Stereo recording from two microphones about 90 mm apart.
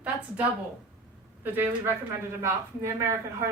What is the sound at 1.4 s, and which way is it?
A woman's voice, 25° right (ahead or behind).